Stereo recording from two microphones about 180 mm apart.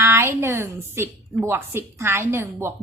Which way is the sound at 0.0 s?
15° right (ahead or behind).